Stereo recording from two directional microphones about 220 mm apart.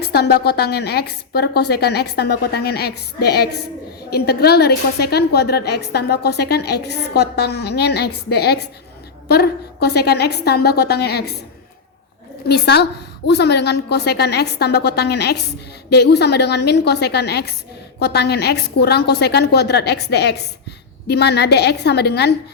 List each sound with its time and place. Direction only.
0.0 s a woman's voice: 45° left (ahead or behind)
12.5 s a woman's voice: 50° left (ahead or behind)